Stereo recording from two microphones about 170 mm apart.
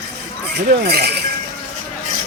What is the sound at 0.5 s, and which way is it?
Speech, 70° right (ahead or behind).